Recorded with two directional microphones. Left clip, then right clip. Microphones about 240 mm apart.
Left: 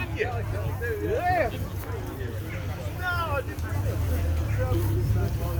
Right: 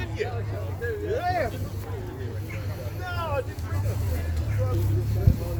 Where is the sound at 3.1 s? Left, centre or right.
Right.